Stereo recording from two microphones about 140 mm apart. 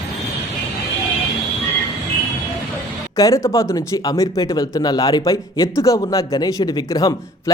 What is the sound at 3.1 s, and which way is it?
Speech, 25° left (ahead or behind).